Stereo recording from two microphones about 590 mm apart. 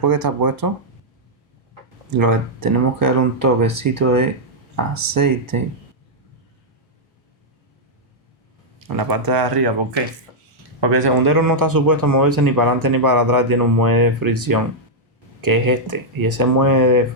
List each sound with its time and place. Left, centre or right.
0.0 s speech: right
2.1 s speech: right
9.0 s speech: right
10.8 s speech: right